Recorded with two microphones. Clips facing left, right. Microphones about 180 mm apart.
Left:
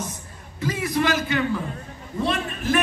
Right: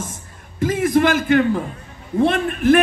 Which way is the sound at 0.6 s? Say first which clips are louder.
Right 7 dB; 50° right (ahead or behind).